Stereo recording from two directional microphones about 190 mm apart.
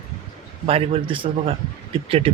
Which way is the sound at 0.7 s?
30° right (ahead or behind).